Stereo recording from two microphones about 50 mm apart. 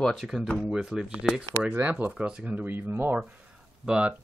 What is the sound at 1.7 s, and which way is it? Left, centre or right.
Speech, right.